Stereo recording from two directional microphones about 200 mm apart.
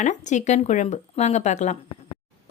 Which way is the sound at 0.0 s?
35° left (ahead or behind).